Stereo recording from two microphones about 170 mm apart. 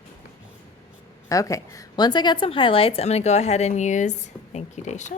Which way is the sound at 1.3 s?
20° left (ahead or behind).